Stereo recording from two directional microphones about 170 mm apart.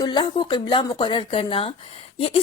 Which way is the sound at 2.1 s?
35° left (ahead or behind).